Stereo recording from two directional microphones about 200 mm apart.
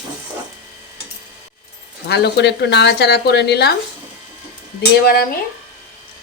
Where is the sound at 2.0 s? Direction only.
55° left (ahead or behind).